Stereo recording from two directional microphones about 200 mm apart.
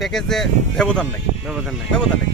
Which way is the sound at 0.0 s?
Centre (ahead or behind).